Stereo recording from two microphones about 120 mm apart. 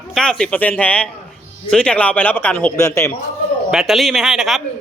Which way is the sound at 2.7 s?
25° left (ahead or behind).